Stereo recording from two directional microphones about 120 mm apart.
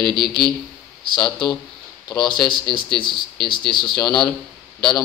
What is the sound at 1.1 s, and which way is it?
A man's voice, 40° left (ahead or behind).